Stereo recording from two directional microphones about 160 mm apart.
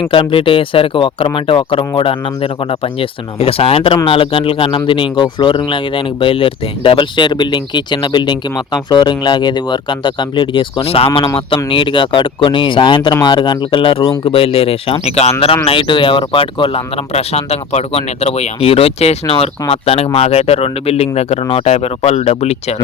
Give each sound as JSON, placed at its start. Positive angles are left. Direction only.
{"t": 0.1, "sound": "speech", "side_deg": 35}